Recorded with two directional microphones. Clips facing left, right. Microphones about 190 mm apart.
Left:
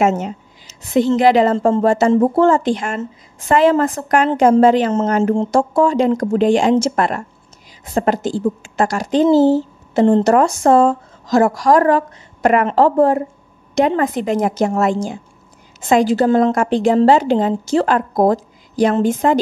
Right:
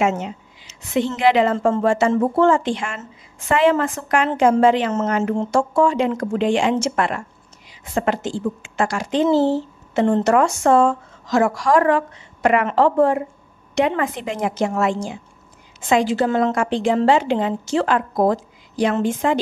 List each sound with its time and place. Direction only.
0.0 s a woman's voice: 45° left (ahead or behind)